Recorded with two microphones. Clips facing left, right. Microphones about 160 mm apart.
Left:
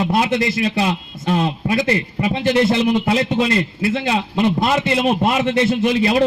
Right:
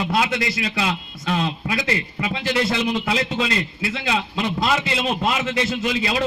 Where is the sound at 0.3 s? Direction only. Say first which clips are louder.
Left 6 dB; 45° left (ahead or behind).